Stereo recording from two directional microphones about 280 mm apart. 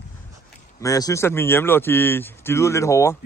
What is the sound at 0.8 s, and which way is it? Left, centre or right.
A man's voice, centre.